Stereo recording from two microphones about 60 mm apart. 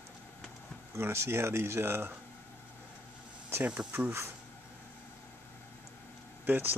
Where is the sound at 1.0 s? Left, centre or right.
Right.